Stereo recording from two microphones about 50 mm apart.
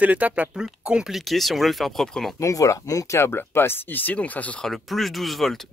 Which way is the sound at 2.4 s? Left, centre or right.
Left.